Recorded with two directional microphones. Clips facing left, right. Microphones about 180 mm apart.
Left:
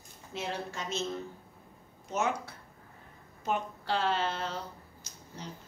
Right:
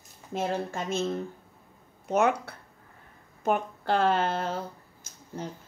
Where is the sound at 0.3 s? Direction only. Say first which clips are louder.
Right 7 dB; 50° right (ahead or behind).